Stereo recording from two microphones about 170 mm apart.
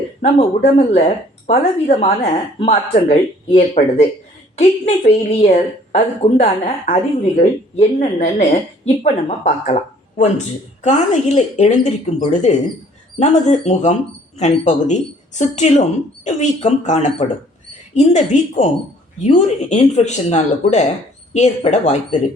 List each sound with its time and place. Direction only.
0.9 s a woman's voice: 40° left (ahead or behind)